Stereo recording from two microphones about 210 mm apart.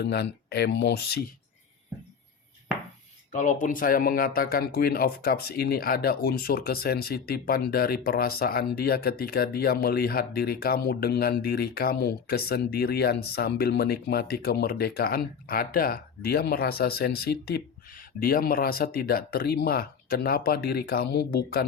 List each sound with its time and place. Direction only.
0.0 s speech: 50° left (ahead or behind)
3.3 s speech: 40° left (ahead or behind)